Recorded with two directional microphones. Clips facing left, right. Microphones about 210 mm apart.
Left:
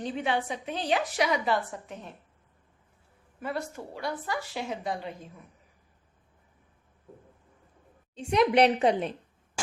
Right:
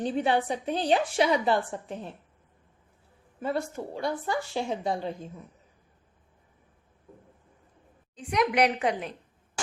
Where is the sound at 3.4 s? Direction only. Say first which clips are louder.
Right 4 dB; 25° right (ahead or behind).